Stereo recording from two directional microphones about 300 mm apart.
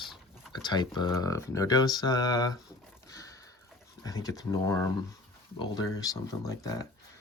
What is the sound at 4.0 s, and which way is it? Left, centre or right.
Speech, centre.